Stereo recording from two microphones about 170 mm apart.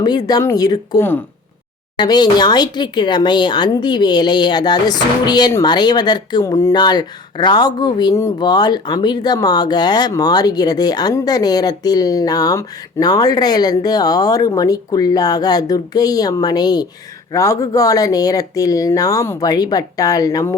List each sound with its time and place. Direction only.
0.0 s speech: 25° left (ahead or behind)
2.0 s speech: 25° left (ahead or behind)